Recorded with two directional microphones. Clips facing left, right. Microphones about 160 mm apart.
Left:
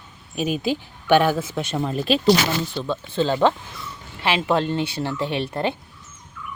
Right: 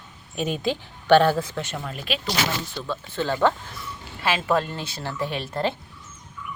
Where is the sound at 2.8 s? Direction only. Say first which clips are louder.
Left 5 dB; 20° left (ahead or behind).